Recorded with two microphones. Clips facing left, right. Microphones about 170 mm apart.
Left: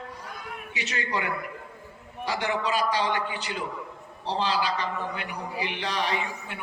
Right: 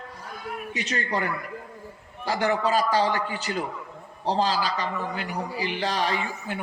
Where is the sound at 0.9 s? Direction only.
40° right (ahead or behind).